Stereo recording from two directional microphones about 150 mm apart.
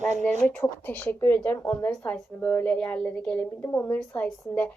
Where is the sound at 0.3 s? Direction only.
10° left (ahead or behind).